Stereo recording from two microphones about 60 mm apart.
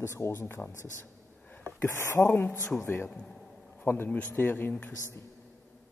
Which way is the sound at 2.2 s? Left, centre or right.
Left.